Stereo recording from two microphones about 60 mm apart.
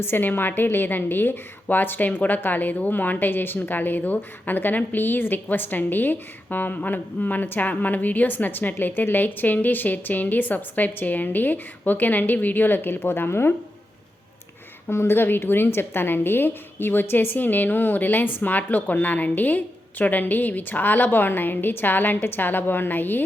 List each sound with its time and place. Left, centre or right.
0.0 s a woman's voice: left
14.8 s a woman's voice: left